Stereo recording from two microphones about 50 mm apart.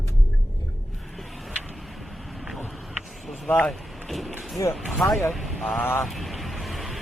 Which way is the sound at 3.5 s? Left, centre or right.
Left.